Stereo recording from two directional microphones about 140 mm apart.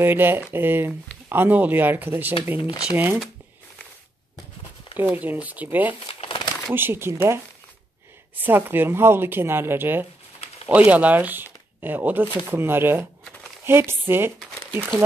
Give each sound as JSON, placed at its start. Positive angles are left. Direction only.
{"t": 0.0, "sound": "speech", "side_deg": -15}
{"t": 4.9, "sound": "speech", "side_deg": -15}
{"t": 6.0, "sound": "crumpling", "side_deg": 35}
{"t": 6.7, "sound": "speech", "side_deg": -15}